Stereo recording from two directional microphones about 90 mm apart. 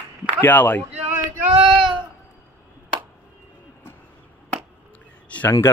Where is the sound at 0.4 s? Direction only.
20° left (ahead or behind).